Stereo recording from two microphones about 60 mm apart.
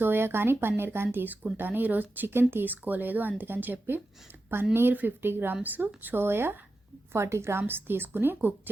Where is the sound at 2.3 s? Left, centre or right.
Right.